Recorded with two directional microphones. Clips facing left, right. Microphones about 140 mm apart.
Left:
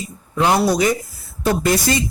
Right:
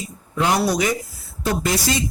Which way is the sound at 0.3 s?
30° left (ahead or behind).